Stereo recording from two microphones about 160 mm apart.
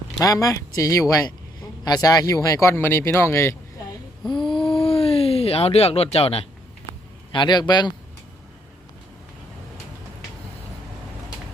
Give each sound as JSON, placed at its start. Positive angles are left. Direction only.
{"t": 0.2, "sound": "speech", "side_deg": 20}
{"t": 4.4, "sound": "a sound", "side_deg": 30}
{"t": 7.3, "sound": "speech", "side_deg": 30}